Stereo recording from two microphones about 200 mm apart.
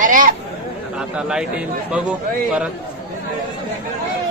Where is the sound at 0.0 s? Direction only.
40° right (ahead or behind).